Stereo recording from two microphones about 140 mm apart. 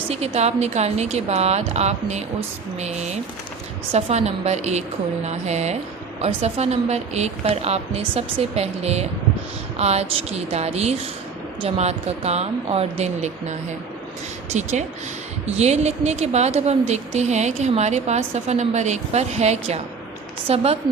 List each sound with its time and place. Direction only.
0.1 s speech: 50° right (ahead or behind)